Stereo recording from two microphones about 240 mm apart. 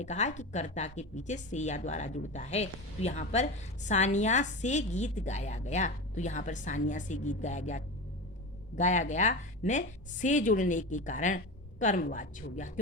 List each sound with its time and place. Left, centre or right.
0.0 s a woman's voice: left